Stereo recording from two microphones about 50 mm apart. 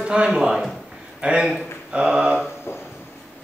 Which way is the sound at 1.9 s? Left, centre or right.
Centre.